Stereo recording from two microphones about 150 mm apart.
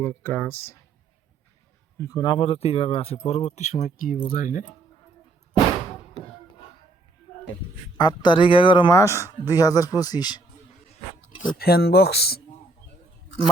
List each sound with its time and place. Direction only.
0.0 s speech: 15° left (ahead or behind)
2.0 s speech: 25° left (ahead or behind)
2.4 s speech: 40° left (ahead or behind); by 4.6 s 60° left (ahead or behind)
7.9 s speech: 30° left (ahead or behind)
8.9 s speech: 20° left (ahead or behind)
11.5 s speech: 90° left